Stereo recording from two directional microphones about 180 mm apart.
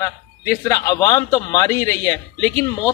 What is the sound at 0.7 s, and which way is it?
Speech, 15° left (ahead or behind).